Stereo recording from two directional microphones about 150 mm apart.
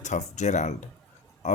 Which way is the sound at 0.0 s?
50° left (ahead or behind).